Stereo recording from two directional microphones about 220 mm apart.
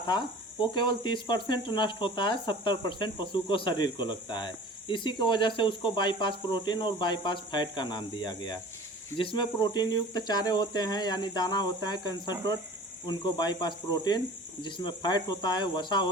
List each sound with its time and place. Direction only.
0.0 s speech: 20° left (ahead or behind)